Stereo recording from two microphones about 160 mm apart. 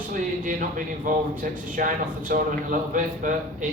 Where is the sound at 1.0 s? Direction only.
60° right (ahead or behind).